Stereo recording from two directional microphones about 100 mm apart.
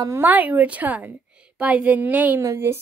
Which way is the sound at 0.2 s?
15° right (ahead or behind).